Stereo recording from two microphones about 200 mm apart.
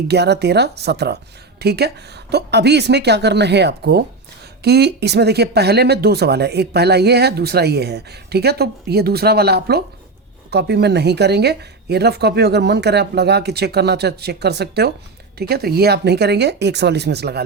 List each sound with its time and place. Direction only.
0.1 s speech: 55° right (ahead or behind)